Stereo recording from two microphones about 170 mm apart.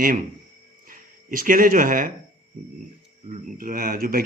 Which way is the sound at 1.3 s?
55° right (ahead or behind).